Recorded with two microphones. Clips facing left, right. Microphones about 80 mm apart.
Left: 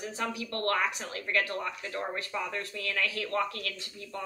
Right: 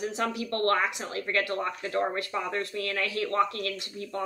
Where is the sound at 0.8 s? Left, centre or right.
Right.